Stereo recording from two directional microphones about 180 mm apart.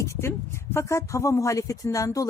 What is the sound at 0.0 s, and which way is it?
A woman's voice, 15° left (ahead or behind).